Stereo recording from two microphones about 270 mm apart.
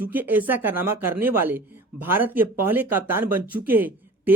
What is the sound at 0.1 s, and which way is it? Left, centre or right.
Speech, centre.